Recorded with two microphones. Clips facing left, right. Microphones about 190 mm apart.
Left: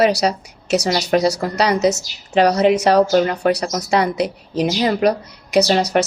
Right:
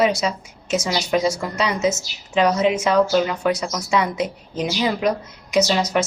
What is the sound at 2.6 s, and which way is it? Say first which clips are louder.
A woman's voice: left 4 dB; 70° left (ahead or behind).